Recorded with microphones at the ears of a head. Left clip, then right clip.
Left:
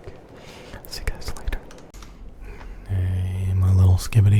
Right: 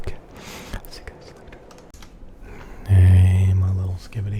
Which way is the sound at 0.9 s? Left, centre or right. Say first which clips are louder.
Left 6 dB; left.